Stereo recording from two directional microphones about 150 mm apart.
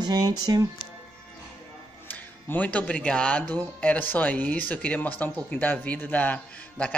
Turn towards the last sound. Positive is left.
turn(degrees=10)  # may be behind; listen again after turning